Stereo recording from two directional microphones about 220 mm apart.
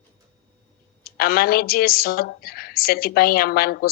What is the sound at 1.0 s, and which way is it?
Speech, 45° left (ahead or behind).